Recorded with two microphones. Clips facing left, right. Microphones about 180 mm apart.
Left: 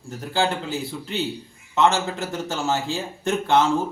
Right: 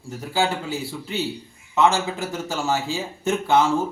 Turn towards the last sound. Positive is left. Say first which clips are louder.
# even
turn(degrees=-5)  # may be behind; listen again after turning